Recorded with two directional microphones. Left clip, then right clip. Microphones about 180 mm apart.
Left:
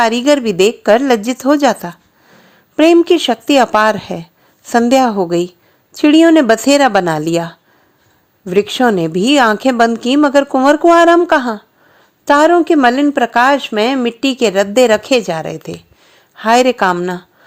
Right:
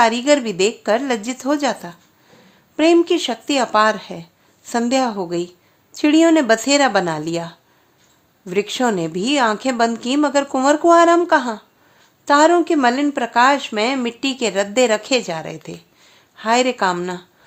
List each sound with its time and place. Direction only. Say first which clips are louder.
0.0 s a woman's voice: left 3 dB; 35° left (ahead or behind)